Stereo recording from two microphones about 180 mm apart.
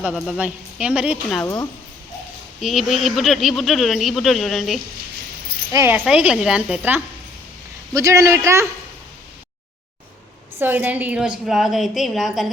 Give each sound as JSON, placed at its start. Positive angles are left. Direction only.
{"t": 0.0, "sound": "speech", "side_deg": -5}
{"t": 2.6, "sound": "speech", "side_deg": 0}
{"t": 5.7, "sound": "speech", "side_deg": -10}
{"t": 10.6, "sound": "speech", "side_deg": -10}